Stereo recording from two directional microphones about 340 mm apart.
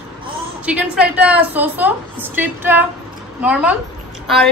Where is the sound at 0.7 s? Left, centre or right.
Centre.